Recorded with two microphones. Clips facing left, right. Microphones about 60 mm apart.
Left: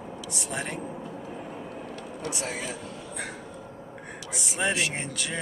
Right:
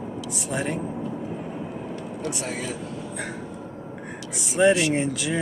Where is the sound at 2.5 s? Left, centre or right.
Centre.